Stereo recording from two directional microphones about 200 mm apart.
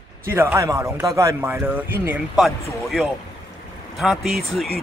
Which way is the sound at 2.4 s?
Centre (ahead or behind).